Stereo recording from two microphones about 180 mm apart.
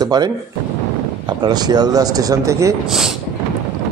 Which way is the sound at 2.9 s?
Centre (ahead or behind).